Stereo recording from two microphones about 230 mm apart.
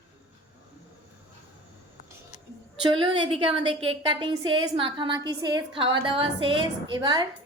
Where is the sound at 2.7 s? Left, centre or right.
Right.